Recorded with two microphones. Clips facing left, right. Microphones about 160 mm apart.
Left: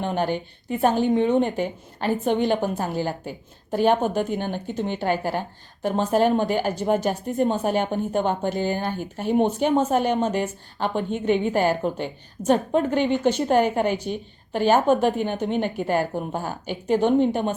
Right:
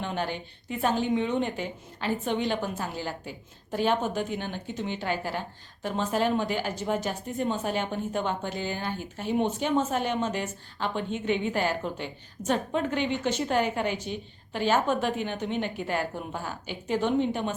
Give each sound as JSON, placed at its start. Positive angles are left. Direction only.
{"t": 0.0, "sound": "a woman's voice", "side_deg": 50}